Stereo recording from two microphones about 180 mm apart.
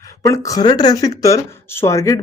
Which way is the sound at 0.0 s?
20° left (ahead or behind).